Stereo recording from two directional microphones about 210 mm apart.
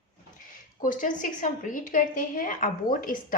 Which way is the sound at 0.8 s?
40° left (ahead or behind).